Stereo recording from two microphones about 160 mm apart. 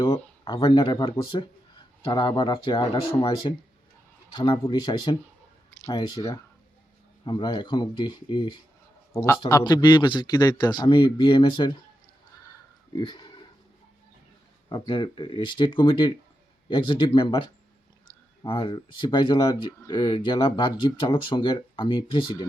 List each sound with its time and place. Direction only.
0.4 s speech: 30° left (ahead or behind)
4.4 s speech: 30° left (ahead or behind)
13.0 s speech: 30° left (ahead or behind)
14.7 s speech: 30° left (ahead or behind)